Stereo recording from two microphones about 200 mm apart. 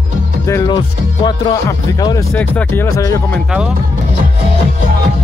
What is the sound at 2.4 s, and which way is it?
Speech, 5° left (ahead or behind).